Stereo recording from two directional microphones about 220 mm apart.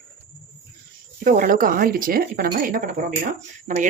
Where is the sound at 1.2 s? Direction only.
40° right (ahead or behind).